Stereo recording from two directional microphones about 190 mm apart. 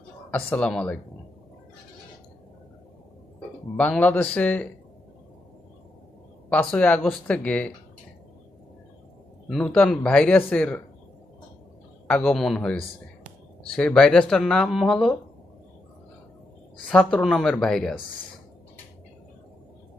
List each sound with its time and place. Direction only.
0.3 s speech: 5° left (ahead or behind)
3.8 s speech: 5° left (ahead or behind)
6.5 s speech: 5° left (ahead or behind)
9.5 s speech: 5° left (ahead or behind)
12.0 s speech: 5° left (ahead or behind)
16.9 s speech: 5° left (ahead or behind)